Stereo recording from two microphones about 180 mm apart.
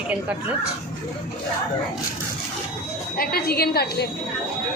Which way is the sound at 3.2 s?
55° left (ahead or behind).